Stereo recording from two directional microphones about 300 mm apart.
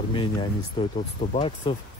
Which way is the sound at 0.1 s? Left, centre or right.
Centre.